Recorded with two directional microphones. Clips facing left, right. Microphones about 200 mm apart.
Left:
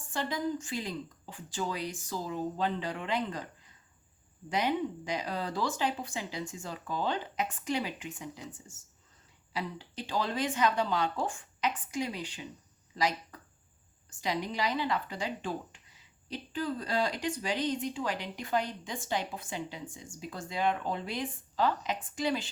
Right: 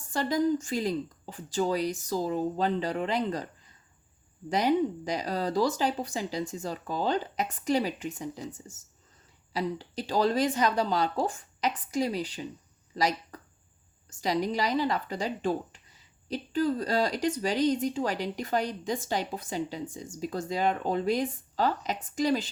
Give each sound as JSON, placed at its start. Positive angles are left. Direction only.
{"t": 0.1, "sound": "speech", "side_deg": -40}
{"t": 13.3, "sound": "a sound", "side_deg": -40}
{"t": 14.2, "sound": "speech", "side_deg": -40}